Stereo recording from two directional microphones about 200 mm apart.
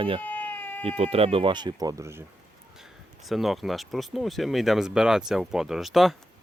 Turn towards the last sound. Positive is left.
turn(degrees=0)  # may be behind; listen again after turning